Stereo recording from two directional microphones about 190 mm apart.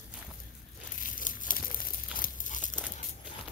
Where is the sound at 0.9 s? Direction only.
45° left (ahead or behind).